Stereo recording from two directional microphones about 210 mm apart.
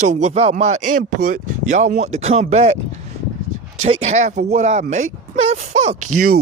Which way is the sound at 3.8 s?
30° right (ahead or behind).